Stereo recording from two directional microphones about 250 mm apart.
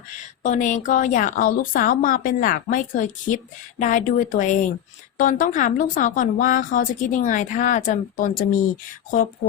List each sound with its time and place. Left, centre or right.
0.4 s a woman's voice: left